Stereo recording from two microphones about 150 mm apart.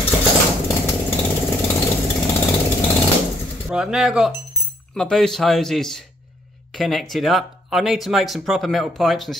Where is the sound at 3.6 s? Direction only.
5° right (ahead or behind).